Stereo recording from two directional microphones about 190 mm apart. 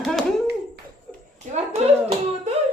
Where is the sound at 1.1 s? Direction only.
5° left (ahead or behind).